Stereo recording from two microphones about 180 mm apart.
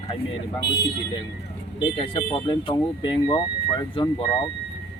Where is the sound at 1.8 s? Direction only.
30° left (ahead or behind).